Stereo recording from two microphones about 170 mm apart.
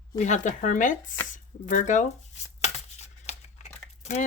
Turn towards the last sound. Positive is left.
turn(degrees=45)  # may be behind; listen again after turning